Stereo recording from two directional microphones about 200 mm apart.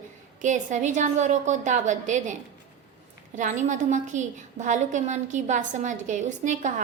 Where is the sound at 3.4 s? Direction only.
40° right (ahead or behind).